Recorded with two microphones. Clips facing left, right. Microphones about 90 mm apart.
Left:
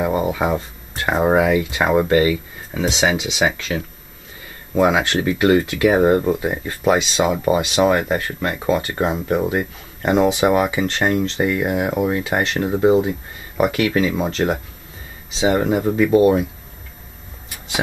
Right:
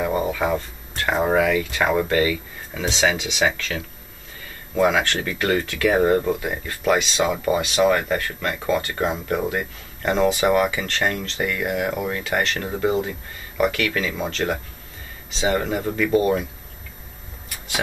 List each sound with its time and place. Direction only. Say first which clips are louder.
0.0 s speech: left 3 dB; 15° left (ahead or behind)